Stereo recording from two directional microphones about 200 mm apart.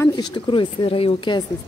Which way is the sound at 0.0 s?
20° left (ahead or behind).